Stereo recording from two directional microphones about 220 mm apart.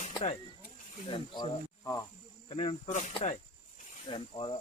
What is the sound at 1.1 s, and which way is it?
Speech, 20° left (ahead or behind).